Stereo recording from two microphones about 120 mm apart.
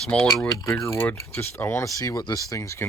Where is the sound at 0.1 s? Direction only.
10° left (ahead or behind).